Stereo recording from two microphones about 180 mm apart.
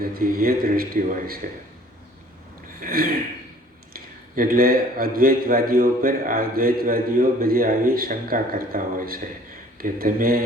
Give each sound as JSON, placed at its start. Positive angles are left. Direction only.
{"t": 0.1, "sound": "a man's voice", "side_deg": -55}
{"t": 2.8, "sound": "a man's voice", "side_deg": -55}